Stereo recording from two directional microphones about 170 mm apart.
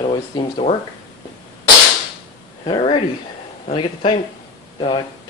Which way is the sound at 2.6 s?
35° left (ahead or behind).